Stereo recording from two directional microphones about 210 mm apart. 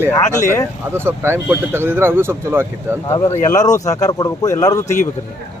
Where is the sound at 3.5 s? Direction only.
15° left (ahead or behind).